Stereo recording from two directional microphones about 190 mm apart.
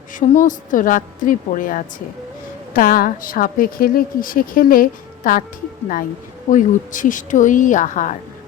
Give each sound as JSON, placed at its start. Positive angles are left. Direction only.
{"t": 0.1, "sound": "a woman's voice", "side_deg": 45}
{"t": 6.5, "sound": "a woman's voice", "side_deg": 45}